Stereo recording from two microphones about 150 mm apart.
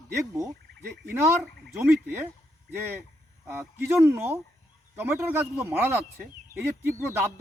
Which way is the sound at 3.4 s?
15° right (ahead or behind).